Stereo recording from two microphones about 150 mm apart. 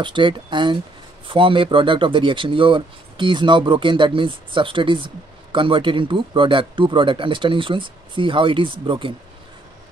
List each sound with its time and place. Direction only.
0.0 s speech: 30° right (ahead or behind)